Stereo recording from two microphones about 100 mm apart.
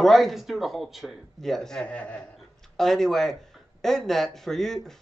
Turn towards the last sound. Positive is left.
turn(degrees=5)  # may be behind; listen again after turning